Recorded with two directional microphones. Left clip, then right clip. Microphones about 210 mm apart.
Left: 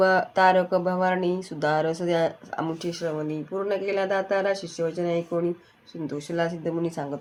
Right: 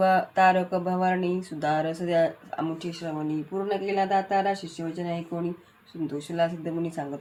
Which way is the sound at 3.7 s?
35° left (ahead or behind).